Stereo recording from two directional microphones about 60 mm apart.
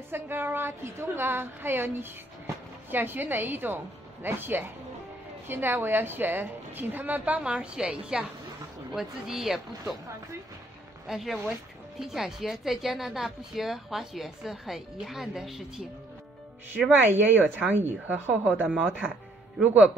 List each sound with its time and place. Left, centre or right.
0.1 s a woman's voice: right; by 8.3 s centre
8.9 s a woman's voice: centre
11.1 s a woman's voice: centre
17.0 s a woman's voice: right